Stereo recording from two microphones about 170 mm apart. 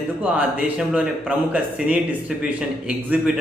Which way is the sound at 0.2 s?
5° right (ahead or behind).